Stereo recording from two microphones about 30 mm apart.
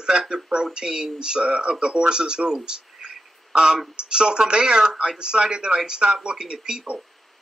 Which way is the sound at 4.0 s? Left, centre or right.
Right.